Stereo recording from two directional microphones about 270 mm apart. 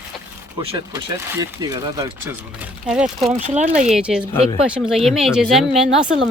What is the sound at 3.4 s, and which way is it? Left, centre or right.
Speech, right.